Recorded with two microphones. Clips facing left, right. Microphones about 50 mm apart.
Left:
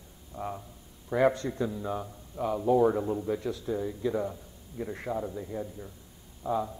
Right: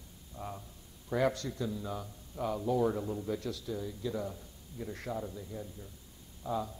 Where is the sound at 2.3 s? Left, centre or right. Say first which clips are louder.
Left 4 dB; centre.